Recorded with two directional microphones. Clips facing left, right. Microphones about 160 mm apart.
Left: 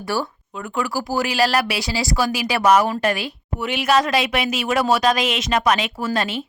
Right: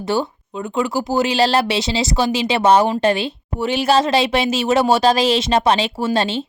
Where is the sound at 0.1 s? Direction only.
20° right (ahead or behind).